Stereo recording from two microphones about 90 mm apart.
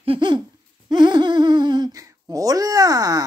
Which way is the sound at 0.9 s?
55° right (ahead or behind).